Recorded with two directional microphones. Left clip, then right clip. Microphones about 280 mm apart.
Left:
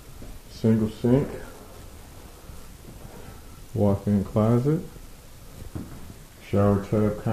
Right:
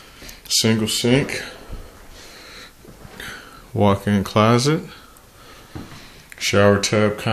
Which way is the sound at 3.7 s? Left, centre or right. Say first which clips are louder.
Right 6 dB; right.